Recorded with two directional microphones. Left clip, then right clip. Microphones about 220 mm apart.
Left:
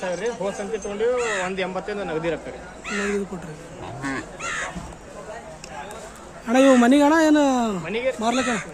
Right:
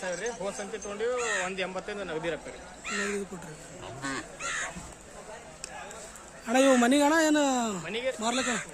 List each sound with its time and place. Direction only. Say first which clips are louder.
0.0 s speech: left 7 dB; centre (ahead or behind)
1.2 s speech: left 6 dB; 25° left (ahead or behind)
1.5 s speech: left 7 dB; centre (ahead or behind)
2.8 s speech: left 5 dB; 25° left (ahead or behind)
4.4 s crow: left 4 dB; 25° left (ahead or behind)
6.4 s a man's voice: left 7 dB; 10° right (ahead or behind)